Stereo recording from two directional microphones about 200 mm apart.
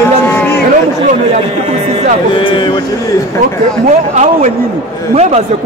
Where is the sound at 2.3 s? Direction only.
25° left (ahead or behind).